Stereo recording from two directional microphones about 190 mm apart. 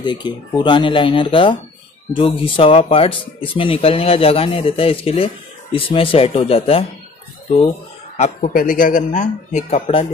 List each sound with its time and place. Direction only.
0.0 s speech: 25° left (ahead or behind)
8.2 s speech: 40° left (ahead or behind)